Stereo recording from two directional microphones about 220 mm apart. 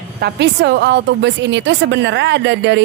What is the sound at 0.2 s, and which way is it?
A woman's voice, 50° right (ahead or behind).